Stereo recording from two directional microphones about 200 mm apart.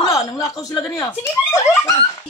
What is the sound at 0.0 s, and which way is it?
Speech, 15° left (ahead or behind).